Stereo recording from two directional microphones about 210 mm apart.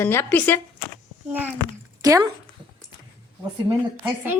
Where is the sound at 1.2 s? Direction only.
10° right (ahead or behind).